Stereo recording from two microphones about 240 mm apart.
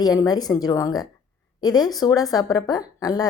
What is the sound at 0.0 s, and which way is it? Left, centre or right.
A woman's voice, centre.